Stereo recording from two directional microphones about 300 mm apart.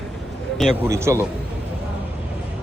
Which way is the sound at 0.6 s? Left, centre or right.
Centre.